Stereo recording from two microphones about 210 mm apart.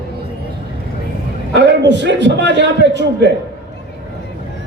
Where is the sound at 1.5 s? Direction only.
55° right (ahead or behind).